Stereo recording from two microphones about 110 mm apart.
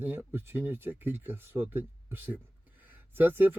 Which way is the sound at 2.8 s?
20° right (ahead or behind).